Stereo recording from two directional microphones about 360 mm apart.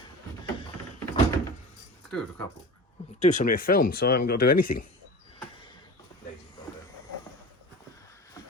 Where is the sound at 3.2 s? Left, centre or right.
Left.